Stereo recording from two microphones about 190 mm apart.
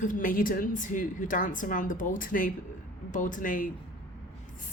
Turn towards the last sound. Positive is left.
turn(degrees=45)  # may be behind; listen again after turning